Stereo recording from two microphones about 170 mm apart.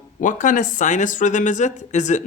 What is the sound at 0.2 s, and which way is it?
Speech, 50° left (ahead or behind).